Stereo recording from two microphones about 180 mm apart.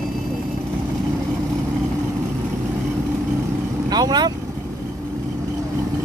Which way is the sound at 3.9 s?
20° right (ahead or behind).